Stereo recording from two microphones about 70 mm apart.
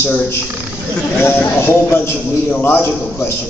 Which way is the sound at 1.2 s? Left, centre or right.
Left.